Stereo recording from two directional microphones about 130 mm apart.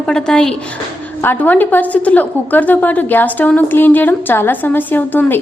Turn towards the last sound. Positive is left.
turn(degrees=15)  # may be behind; listen again after turning